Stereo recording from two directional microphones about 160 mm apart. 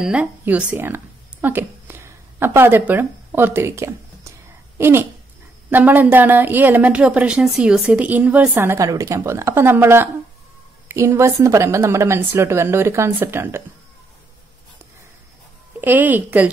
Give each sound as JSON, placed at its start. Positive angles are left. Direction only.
{"t": 0.0, "sound": "a woman's voice", "side_deg": -5}
{"t": 15.8, "sound": "a woman's voice", "side_deg": -10}